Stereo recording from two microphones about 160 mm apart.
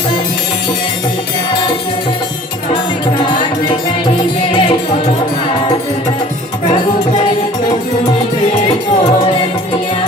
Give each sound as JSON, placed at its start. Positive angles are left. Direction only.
{"t": 3.2, "sound": "music", "side_deg": 30}
{"t": 4.5, "sound": "music", "side_deg": 30}